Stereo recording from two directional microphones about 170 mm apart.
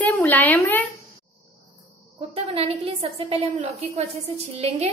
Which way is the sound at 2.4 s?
35° right (ahead or behind).